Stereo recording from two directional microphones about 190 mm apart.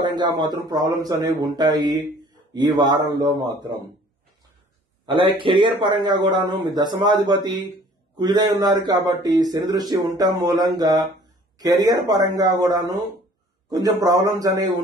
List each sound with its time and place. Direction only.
0.0 s a sound: 20° right (ahead or behind)
0.4 s speech: 20° right (ahead or behind)
5.0 s speech: 25° right (ahead or behind)